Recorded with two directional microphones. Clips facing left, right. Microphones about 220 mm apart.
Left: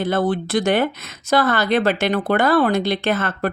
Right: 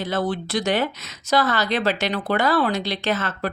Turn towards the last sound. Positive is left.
turn(degrees=55)  # may be behind; listen again after turning